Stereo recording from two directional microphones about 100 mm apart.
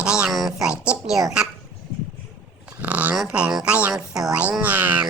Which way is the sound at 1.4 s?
10° right (ahead or behind).